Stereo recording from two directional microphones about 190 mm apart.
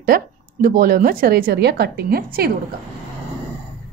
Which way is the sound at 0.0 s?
50° right (ahead or behind).